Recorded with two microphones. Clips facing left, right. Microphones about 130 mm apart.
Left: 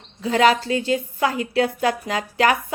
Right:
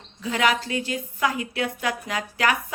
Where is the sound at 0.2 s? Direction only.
30° left (ahead or behind).